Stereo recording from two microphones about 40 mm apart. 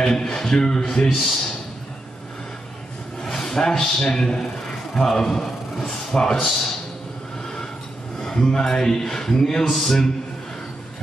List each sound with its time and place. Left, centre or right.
0.0 s a man's voice: centre
1.0 s a man's voice: centre
3.2 s a man's voice: centre
8.2 s a man's voice: centre